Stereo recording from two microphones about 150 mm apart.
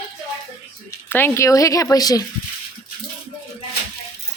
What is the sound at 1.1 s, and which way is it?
Speech, 15° left (ahead or behind).